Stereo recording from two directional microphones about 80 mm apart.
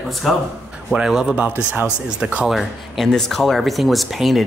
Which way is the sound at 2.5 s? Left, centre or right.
Centre.